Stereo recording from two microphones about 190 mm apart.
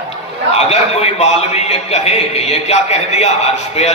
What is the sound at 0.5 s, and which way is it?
A man's voice, 35° left (ahead or behind).